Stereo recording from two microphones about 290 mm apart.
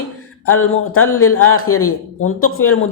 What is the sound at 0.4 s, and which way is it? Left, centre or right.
A woman's voice, left.